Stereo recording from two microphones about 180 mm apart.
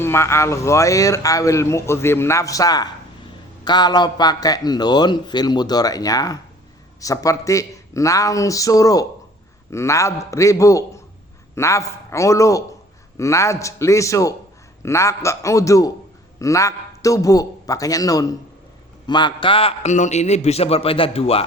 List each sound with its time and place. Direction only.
0.0 s a man's voice: 15° left (ahead or behind); by 21.4 s 30° left (ahead or behind)